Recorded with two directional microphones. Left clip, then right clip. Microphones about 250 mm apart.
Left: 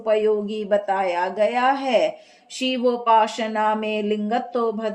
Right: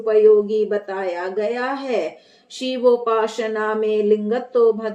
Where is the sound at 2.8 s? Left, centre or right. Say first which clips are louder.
Right 1 dB; left.